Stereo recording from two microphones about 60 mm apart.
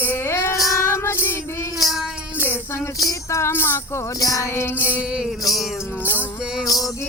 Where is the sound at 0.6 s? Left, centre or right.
Left.